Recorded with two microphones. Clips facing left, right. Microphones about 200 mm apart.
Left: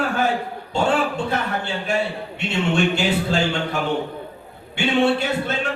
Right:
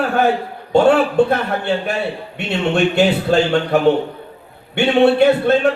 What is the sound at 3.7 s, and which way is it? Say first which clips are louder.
Speech: right 9 dB; 60° right (ahead or behind).